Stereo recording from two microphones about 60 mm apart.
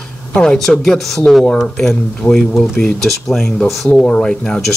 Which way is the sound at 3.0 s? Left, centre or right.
Centre.